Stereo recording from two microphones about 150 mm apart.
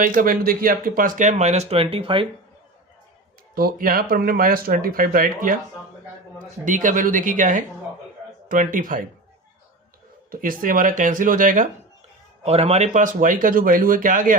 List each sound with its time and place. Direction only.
0.0 s speech: 65° right (ahead or behind); by 2.2 s 35° right (ahead or behind)
3.5 s speech: 75° right (ahead or behind)
6.7 s speech: 60° right (ahead or behind)
10.4 s speech: 65° right (ahead or behind)
12.5 s speech: 40° right (ahead or behind); by 14.3 s 60° right (ahead or behind)